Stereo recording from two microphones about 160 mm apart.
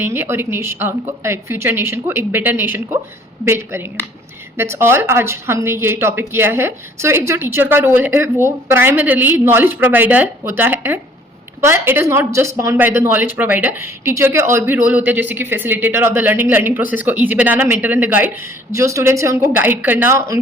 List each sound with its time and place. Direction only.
0.0 s speech: 15° right (ahead or behind)